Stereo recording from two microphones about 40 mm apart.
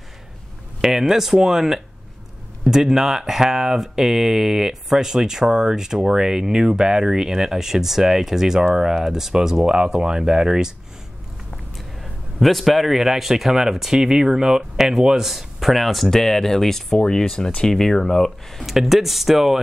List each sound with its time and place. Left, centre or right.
0.7 s speech: centre
12.0 s speech: centre
18.7 s speech: centre